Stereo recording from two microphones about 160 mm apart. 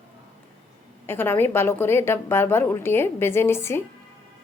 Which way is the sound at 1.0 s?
15° left (ahead or behind).